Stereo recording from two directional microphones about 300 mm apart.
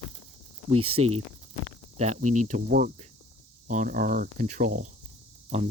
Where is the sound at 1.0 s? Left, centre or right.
Centre.